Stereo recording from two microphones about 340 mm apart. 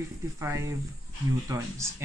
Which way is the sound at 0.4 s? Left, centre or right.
Centre.